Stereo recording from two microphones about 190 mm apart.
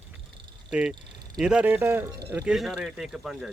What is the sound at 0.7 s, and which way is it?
Speech, 5° right (ahead or behind).